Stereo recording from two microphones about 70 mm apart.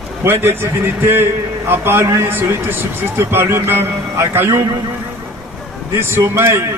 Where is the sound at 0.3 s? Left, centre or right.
Right.